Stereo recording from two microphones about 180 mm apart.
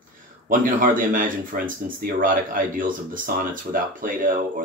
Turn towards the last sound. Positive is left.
turn(degrees=-50)  # may be behind; listen again after turning